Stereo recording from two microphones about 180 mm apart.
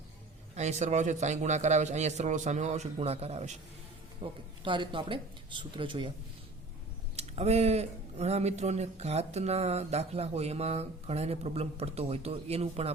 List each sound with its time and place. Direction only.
0.5 s speech: 40° right (ahead or behind)
4.2 s speech: 25° right (ahead or behind)
7.2 s speech: 35° right (ahead or behind)